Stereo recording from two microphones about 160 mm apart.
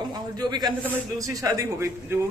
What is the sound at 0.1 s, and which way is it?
A man's voice, 25° right (ahead or behind).